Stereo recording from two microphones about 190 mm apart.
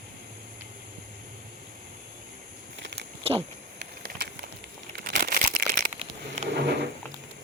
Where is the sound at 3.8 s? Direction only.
55° right (ahead or behind).